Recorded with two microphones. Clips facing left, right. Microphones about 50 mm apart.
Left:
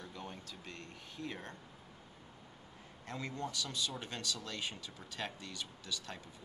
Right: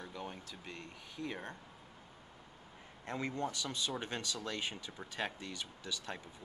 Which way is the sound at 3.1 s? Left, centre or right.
Right.